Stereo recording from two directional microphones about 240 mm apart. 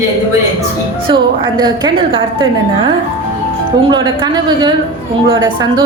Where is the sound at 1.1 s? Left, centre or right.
Centre.